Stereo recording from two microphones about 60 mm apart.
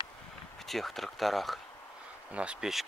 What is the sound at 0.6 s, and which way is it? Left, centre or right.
Speech, centre.